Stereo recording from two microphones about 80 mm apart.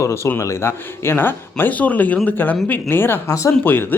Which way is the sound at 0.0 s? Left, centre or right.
Left.